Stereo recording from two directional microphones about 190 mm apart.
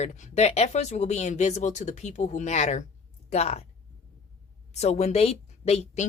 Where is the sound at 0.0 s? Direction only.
35° left (ahead or behind).